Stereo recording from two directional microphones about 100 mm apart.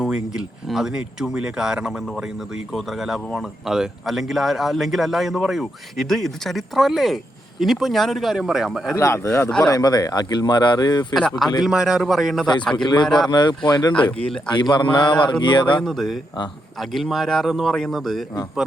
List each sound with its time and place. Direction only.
0.0 s speech: 5° right (ahead or behind)
9.0 s speech: 30° left (ahead or behind)
9.6 s speech: 40° left (ahead or behind)
11.2 s speech: 5° left (ahead or behind)
12.7 s a sound: 45° left (ahead or behind)
13.9 s speech: 10° left (ahead or behind)
14.5 s a sound: 45° left (ahead or behind)
15.8 s speech: 5° left (ahead or behind)